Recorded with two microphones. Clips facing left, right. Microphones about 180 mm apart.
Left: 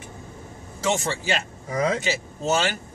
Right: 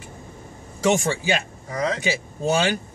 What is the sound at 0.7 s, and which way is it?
Speech, 15° right (ahead or behind).